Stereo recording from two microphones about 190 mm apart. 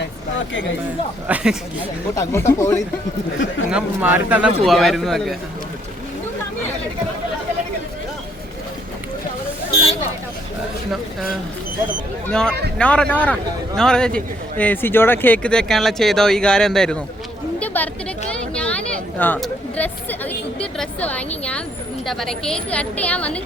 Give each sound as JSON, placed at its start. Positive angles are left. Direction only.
{"t": 0.0, "sound": "a sound", "side_deg": 80}
{"t": 1.3, "sound": "speech", "side_deg": -5}
{"t": 2.1, "sound": "speech", "side_deg": 15}
{"t": 3.7, "sound": "speech", "side_deg": -5}
{"t": 12.3, "sound": "a woman's voice", "side_deg": 5}
{"t": 18.3, "sound": "a sound", "side_deg": 5}
{"t": 19.2, "sound": "speech", "side_deg": 10}